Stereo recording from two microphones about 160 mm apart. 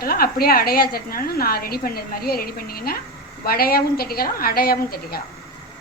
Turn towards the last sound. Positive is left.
turn(degrees=70)  # may be behind; listen again after turning